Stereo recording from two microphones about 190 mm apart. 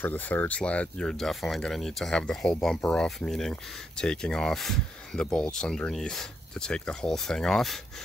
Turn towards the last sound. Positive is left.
turn(degrees=0)  # may be behind; listen again after turning